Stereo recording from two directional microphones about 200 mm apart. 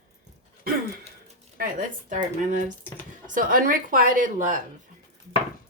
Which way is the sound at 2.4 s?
40° right (ahead or behind).